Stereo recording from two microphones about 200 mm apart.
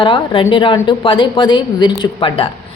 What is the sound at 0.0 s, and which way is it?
A woman's voice, 25° left (ahead or behind).